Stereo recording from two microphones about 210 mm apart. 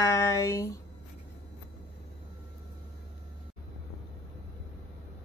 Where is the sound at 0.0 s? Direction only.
15° left (ahead or behind).